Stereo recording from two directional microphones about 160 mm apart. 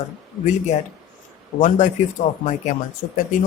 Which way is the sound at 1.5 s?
50° left (ahead or behind).